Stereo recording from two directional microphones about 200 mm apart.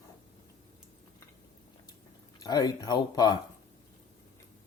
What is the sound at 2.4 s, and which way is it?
Speech, 20° left (ahead or behind).